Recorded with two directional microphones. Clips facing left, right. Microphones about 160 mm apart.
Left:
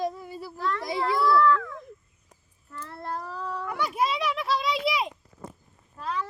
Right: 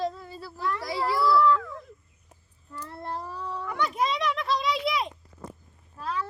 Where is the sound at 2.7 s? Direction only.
20° right (ahead or behind).